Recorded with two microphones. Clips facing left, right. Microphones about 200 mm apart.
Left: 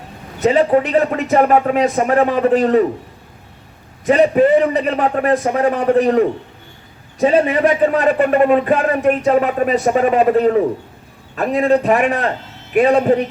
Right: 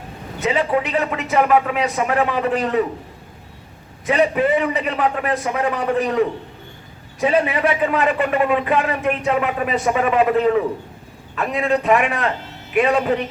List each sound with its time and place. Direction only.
0.4 s speech: 40° left (ahead or behind)
4.0 s a man's voice: 45° left (ahead or behind)